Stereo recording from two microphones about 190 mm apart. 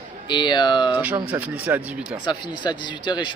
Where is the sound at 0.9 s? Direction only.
10° right (ahead or behind).